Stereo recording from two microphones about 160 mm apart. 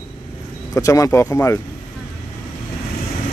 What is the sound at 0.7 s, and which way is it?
Speech, 20° left (ahead or behind).